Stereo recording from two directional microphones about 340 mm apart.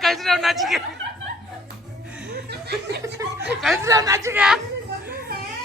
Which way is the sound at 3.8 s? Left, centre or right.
Centre.